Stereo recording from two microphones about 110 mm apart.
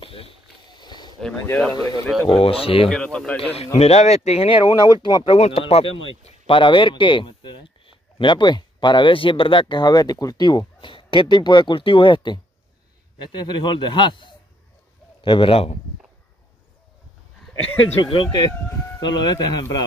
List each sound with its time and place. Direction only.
0.0 s a sound: 55° left (ahead or behind)
1.7 s speech: 35° left (ahead or behind)
2.0 s speech: centre (ahead or behind)
2.3 s a man's voice: 55° left (ahead or behind)
2.9 s a man's voice: 10° left (ahead or behind)
3.5 s speech: 70° left (ahead or behind)
4.6 s speech: 40° left (ahead or behind)
5.2 s a man's voice: 60° left (ahead or behind)
18.1 s speech: 50° left (ahead or behind)
18.9 s speech: 40° left (ahead or behind)